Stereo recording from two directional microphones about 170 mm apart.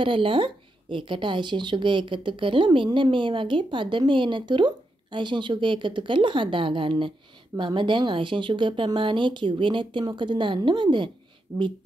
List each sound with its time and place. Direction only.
0.0 s speech: 30° right (ahead or behind)